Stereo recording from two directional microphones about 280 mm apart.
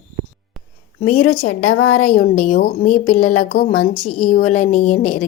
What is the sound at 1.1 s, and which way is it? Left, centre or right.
Speech, left.